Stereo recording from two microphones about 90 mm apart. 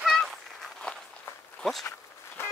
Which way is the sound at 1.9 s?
25° left (ahead or behind).